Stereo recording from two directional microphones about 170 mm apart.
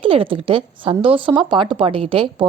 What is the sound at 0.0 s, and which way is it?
A woman's voice, 30° right (ahead or behind).